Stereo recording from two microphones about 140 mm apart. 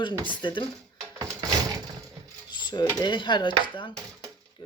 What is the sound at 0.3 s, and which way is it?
Speech, 35° left (ahead or behind).